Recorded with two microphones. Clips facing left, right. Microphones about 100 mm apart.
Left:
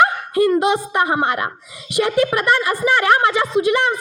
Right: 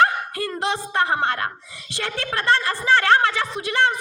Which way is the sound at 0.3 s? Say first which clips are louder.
Left 15 dB; 15° left (ahead or behind).